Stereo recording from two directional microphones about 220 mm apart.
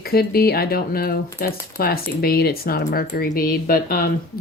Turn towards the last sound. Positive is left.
turn(degrees=40)  # may be behind; listen again after turning